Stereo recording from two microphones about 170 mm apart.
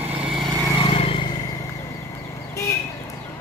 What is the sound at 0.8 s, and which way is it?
Vehicle, 35° left (ahead or behind).